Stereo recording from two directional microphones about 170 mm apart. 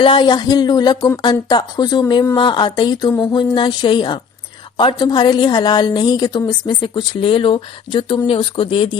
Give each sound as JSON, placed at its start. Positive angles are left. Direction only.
{"t": 0.0, "sound": "speech", "side_deg": 30}